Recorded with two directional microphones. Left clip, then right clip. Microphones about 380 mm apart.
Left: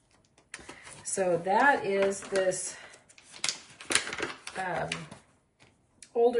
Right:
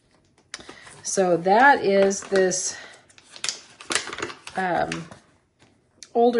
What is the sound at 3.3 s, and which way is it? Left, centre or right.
Typewriter, centre.